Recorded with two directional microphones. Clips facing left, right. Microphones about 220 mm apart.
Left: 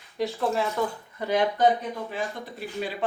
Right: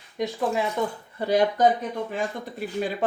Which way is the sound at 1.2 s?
35° right (ahead or behind).